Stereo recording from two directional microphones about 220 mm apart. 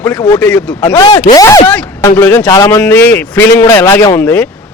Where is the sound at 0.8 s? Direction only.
15° left (ahead or behind).